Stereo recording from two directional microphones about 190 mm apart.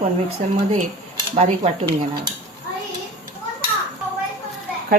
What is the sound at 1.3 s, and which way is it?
Speech, 35° right (ahead or behind).